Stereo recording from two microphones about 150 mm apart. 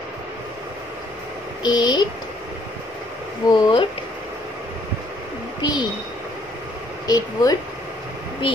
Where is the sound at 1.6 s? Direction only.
30° left (ahead or behind).